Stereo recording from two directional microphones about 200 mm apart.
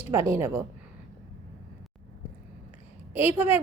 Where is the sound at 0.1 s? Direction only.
15° right (ahead or behind).